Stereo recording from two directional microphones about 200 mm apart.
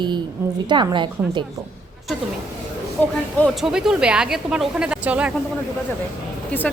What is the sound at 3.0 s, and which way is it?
A woman's voice, 10° left (ahead or behind).